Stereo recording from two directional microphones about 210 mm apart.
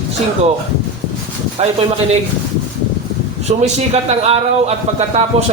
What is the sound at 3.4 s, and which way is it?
A man's voice, 30° right (ahead or behind).